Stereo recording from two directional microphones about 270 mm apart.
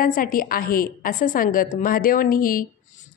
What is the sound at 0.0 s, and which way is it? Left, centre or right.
A woman's voice, left.